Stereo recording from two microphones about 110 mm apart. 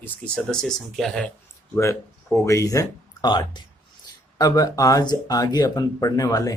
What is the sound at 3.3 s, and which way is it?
Speech, 40° left (ahead or behind).